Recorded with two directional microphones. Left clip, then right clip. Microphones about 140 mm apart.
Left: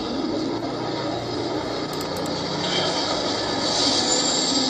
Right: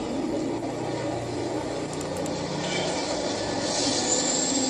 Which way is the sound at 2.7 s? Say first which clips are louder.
Left 5 dB; 25° right (ahead or behind).